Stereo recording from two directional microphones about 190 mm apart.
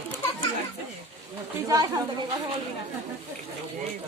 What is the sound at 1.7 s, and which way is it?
Speech, 20° right (ahead or behind).